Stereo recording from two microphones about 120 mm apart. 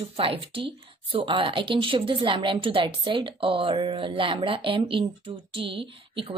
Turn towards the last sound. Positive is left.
turn(degrees=-45)  # may be behind; listen again after turning